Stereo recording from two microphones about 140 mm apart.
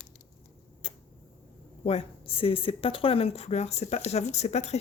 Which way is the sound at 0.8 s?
45° left (ahead or behind).